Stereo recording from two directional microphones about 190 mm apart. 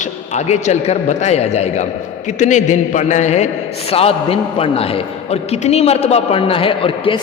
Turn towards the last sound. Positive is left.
turn(degrees=25)  # may be behind; listen again after turning